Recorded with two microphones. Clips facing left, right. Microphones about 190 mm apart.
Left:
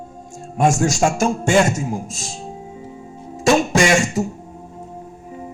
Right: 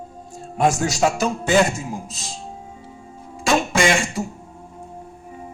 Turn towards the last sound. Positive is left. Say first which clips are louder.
# left 3 dB
turn(degrees=40)  # may be behind; listen again after turning